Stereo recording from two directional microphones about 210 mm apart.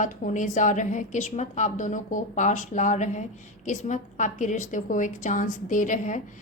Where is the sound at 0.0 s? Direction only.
35° left (ahead or behind).